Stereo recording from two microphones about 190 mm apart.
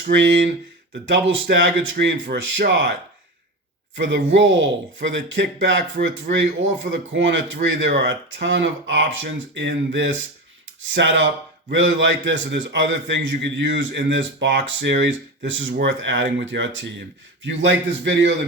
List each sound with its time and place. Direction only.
0.1 s a man's voice: 70° right (ahead or behind)
3.9 s a man's voice: 75° right (ahead or behind)